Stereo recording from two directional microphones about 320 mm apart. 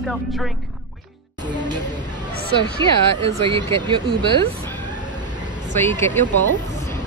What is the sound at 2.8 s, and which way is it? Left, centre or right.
Speech, centre.